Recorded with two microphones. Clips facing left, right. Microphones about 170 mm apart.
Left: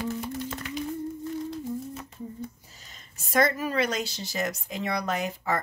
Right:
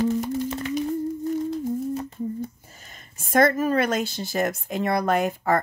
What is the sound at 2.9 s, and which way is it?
Speech, 50° right (ahead or behind).